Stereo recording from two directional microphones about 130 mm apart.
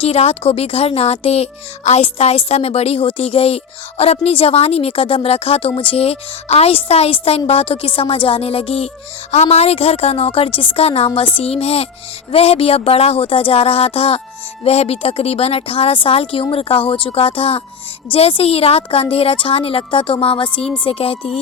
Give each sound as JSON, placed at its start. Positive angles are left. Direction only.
{"t": 0.0, "sound": "a woman's voice", "side_deg": 50}